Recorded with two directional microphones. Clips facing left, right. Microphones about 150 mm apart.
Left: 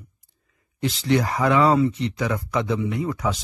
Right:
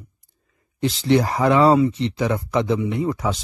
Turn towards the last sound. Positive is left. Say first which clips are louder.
# right 3 dB
turn(degrees=-30)  # may be behind; listen again after turning